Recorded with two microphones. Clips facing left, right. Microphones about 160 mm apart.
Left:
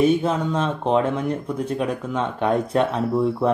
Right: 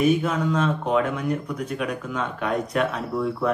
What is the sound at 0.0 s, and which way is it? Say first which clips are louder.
Speech: left 2 dB; 30° left (ahead or behind).